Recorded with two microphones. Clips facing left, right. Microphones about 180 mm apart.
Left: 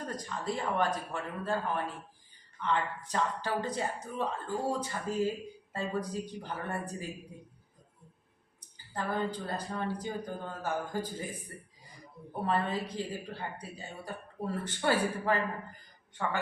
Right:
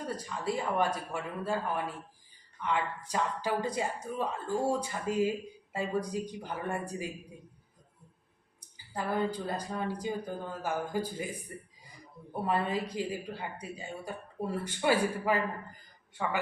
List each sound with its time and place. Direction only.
0.4 s speech: 10° right (ahead or behind)
8.9 s speech: 10° right (ahead or behind)
12.4 s speech: 10° right (ahead or behind)